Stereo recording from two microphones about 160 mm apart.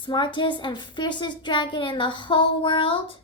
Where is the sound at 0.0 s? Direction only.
30° left (ahead or behind).